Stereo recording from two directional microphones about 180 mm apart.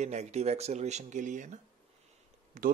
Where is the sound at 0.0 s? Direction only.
40° right (ahead or behind).